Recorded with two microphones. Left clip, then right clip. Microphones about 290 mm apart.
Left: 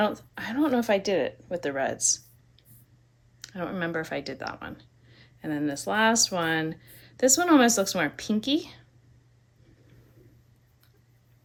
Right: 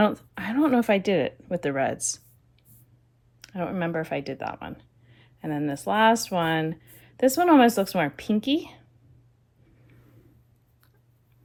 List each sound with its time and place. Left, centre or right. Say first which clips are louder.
0.0 s speech: right 3 dB; right
3.4 s speech: right 2 dB; centre